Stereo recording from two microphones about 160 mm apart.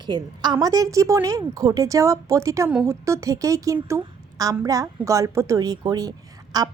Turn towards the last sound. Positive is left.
turn(degrees=-25)  # may be behind; listen again after turning